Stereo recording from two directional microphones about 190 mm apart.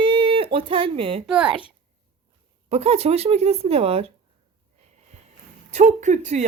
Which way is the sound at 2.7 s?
35° right (ahead or behind).